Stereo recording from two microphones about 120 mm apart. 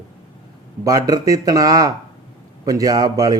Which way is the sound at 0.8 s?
30° right (ahead or behind).